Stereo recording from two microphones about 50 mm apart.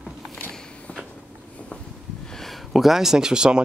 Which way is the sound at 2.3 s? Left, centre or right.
Centre.